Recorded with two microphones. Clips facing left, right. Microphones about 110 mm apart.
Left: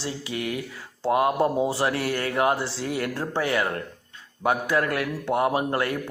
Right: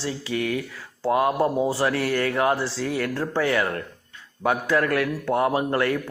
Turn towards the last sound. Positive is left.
turn(degrees=25)  # may be behind; listen again after turning